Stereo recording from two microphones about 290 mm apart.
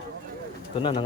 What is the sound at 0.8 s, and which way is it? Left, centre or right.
Speech, centre.